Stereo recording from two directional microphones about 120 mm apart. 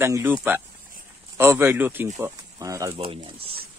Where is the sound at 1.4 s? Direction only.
20° right (ahead or behind).